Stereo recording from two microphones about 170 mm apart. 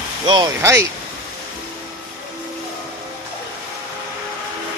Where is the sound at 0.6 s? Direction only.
15° right (ahead or behind).